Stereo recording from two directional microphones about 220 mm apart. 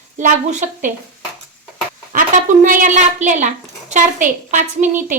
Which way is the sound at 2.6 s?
35° right (ahead or behind).